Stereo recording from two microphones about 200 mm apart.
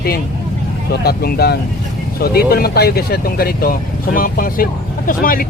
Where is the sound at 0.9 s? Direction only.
50° left (ahead or behind).